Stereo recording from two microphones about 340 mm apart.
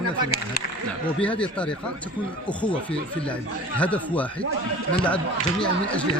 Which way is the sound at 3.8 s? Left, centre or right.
Centre.